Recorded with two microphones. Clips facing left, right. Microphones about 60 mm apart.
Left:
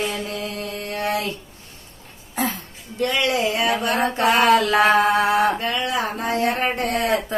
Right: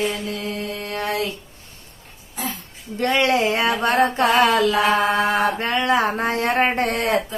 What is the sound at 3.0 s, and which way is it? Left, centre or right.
Mantra, right.